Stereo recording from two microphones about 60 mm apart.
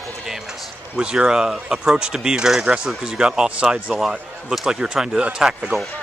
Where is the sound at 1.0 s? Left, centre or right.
Centre.